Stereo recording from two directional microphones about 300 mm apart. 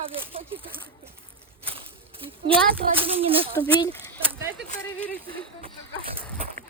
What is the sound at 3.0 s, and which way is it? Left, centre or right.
Speech, centre.